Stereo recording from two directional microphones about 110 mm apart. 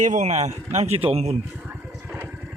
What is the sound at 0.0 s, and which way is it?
A man's voice, 90° right.